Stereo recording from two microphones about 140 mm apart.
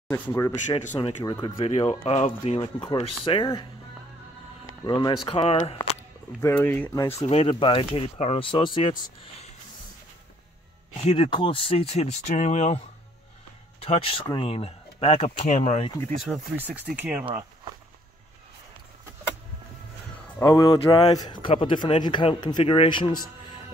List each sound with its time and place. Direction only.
0.1 s speech: 20° left (ahead or behind)
0.9 s speech: 30° left (ahead or behind)
1.6 s speech: 50° left (ahead or behind)
4.8 s speech: 30° left (ahead or behind); by 5.8 s 45° left (ahead or behind)
6.4 s speech: 15° left (ahead or behind)
7.2 s speech: 45° left (ahead or behind)
11.0 s speech: 45° left (ahead or behind)
13.8 s speech: 40° left (ahead or behind)
16.3 s speech: 5° left (ahead or behind)
16.9 s speech: 10° right (ahead or behind)
17.2 s speech: 40° right (ahead or behind)
20.4 s speech: 25° left (ahead or behind)